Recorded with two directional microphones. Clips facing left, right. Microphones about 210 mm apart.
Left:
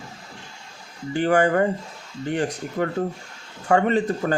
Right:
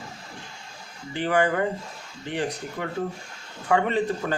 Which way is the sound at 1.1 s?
45° left (ahead or behind).